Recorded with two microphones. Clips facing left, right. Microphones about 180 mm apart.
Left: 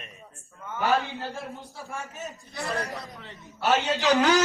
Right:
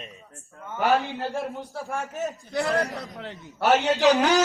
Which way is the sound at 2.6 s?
70° right (ahead or behind).